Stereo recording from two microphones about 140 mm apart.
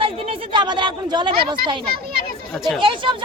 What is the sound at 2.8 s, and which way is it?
Speech, 35° right (ahead or behind).